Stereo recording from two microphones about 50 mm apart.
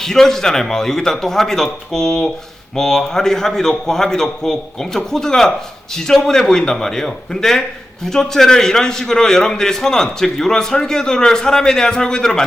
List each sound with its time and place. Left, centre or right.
0.0 s a man's voice: centre